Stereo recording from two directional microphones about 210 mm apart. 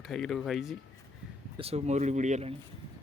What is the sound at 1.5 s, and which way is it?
Speech, 30° right (ahead or behind).